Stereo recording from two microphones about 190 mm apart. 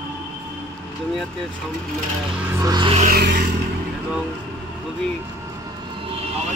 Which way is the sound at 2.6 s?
25° right (ahead or behind).